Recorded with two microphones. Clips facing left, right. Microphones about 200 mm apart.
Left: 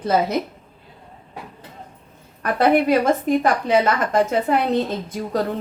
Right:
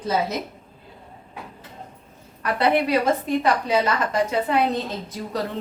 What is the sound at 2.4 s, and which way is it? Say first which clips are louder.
A woman's voice: left 4 dB; 50° left (ahead or behind).